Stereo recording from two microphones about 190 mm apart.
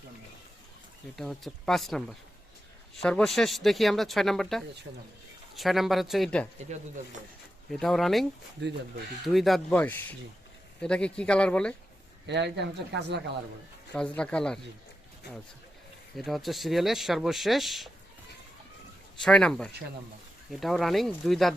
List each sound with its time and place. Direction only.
1.1 s speech: centre (ahead or behind)
7.7 s speech: centre (ahead or behind)
8.6 s speech: 60° right (ahead or behind)
9.2 s speech: centre (ahead or behind)
12.2 s speech: 65° right (ahead or behind)
13.9 s speech: 5° left (ahead or behind)
16.1 s speech: centre (ahead or behind)
19.2 s speech: 5° left (ahead or behind)